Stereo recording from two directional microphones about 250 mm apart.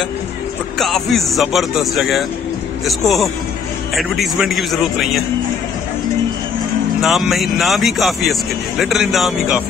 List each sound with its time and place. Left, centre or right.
0.7 s speech: centre
7.0 s speech: centre